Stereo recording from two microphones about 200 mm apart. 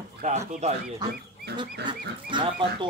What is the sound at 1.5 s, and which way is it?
Speech, 25° right (ahead or behind).